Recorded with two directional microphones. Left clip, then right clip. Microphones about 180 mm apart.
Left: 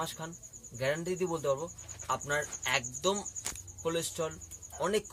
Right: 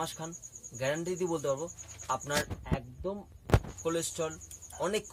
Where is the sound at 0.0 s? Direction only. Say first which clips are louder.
Right 1 dB; 5° right (ahead or behind).